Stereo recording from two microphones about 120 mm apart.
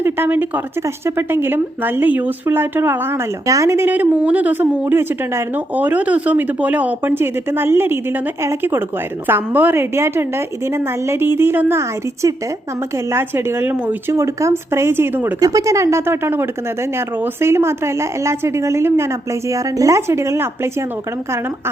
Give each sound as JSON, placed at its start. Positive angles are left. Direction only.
{"t": 0.0, "sound": "a woman's voice", "side_deg": -20}
{"t": 15.4, "sound": "a woman's voice", "side_deg": -30}